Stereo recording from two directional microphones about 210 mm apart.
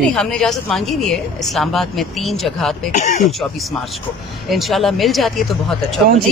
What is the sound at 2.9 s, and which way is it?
Speech, 35° left (ahead or behind).